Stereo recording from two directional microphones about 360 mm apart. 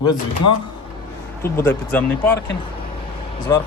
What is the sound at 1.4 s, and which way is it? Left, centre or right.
Speech, centre.